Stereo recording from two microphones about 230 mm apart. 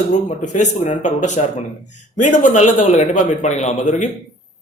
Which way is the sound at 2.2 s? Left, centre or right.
Left.